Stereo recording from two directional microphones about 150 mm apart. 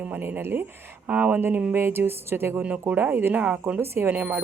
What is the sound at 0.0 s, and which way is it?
A woman's voice, 10° right (ahead or behind).